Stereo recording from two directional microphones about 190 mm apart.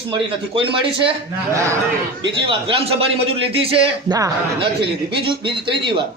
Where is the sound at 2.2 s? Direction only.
25° right (ahead or behind).